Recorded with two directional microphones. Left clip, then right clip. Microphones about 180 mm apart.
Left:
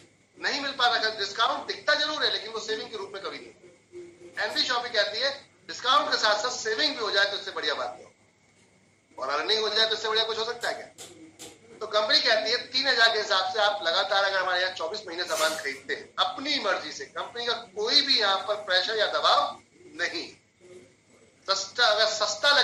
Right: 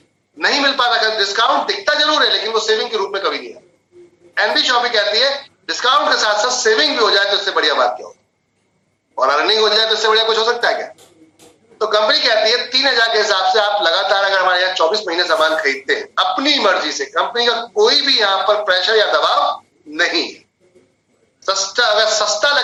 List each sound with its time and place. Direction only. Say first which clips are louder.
0.3 s a man's voice: right 14 dB; 45° right (ahead or behind)
9.1 s a man's voice: right 13 dB; 45° right (ahead or behind)
21.4 s a man's voice: right 8 dB; 45° right (ahead or behind)